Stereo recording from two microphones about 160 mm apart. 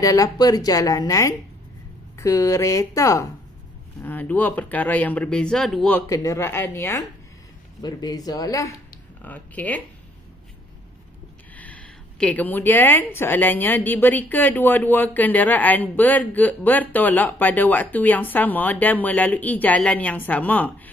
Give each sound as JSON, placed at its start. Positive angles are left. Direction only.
{"t": 0.0, "sound": "a woman's voice", "side_deg": 20}
{"t": 6.0, "sound": "a woman's voice", "side_deg": 20}
{"t": 7.8, "sound": "speech", "side_deg": 25}
{"t": 9.2, "sound": "a woman's voice", "side_deg": 10}
{"t": 11.5, "sound": "a woman's voice", "side_deg": 10}